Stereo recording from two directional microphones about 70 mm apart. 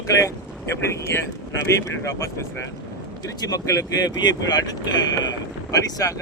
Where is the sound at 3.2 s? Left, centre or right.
Left.